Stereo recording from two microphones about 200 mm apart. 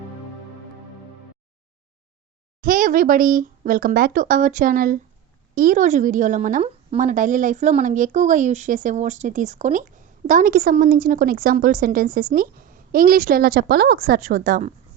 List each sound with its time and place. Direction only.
2.6 s a woman's voice: 45° right (ahead or behind)